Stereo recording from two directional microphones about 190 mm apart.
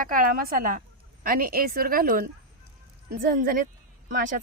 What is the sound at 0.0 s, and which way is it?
A woman's voice, 50° right (ahead or behind).